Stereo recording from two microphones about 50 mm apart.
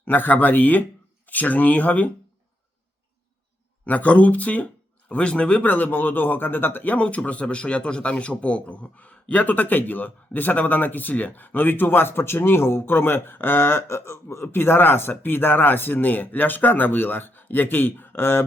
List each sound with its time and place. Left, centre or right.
0.0 s speech: left
3.8 s speech: left
6.9 s a man's voice: left